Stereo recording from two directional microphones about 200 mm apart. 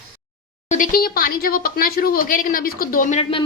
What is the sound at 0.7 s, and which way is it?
Speech, 40° left (ahead or behind).